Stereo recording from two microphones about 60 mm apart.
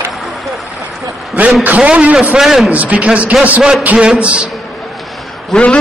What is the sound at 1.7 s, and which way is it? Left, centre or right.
Speech, centre.